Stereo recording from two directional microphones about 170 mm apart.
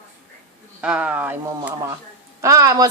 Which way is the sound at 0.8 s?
5° right (ahead or behind).